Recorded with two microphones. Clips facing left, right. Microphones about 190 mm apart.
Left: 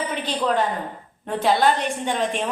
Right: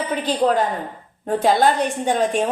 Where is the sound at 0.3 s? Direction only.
40° right (ahead or behind).